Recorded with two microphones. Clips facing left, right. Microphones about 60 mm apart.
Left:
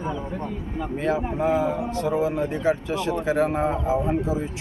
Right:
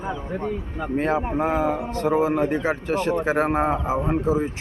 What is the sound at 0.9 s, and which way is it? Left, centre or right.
Speech, right.